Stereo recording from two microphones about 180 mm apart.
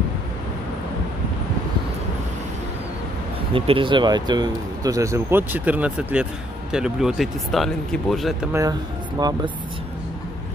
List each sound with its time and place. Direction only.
3.5 s speech: 30° right (ahead or behind); by 8.5 s centre (ahead or behind)
9.2 s speech: 20° right (ahead or behind)